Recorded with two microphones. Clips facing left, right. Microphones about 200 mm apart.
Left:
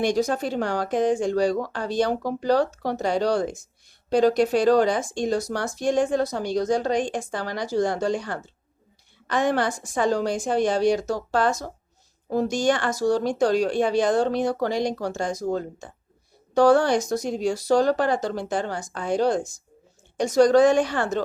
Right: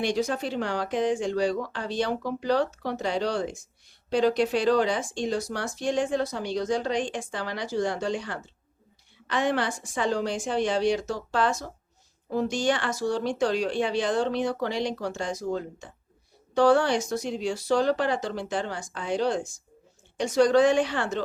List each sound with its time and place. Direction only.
0.0 s speech: 45° left (ahead or behind)